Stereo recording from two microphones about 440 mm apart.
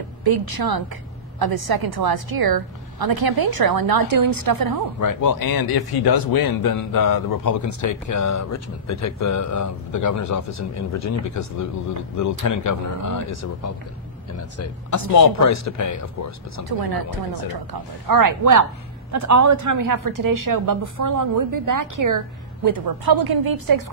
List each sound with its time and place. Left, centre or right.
0.2 s a woman's voice: right
5.0 s a man's voice: left
16.6 s a woman's voice: right
22.7 s a woman's voice: right